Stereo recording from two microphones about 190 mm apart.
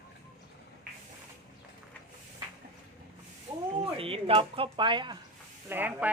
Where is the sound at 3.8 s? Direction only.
30° right (ahead or behind).